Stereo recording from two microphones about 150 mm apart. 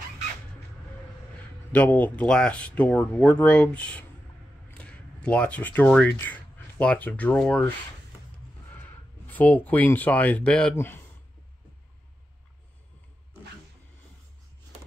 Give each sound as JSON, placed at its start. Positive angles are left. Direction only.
{"t": 1.7, "sound": "speech", "side_deg": 10}
{"t": 9.3, "sound": "speech", "side_deg": 10}